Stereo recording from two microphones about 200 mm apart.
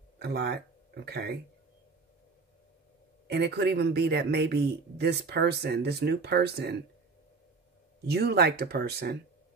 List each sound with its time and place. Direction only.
0.2 s speech: 55° right (ahead or behind)
3.3 s speech: 60° right (ahead or behind)
8.1 s speech: 55° right (ahead or behind)